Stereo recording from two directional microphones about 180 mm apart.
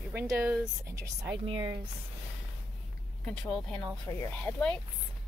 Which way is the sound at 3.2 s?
5° left (ahead or behind).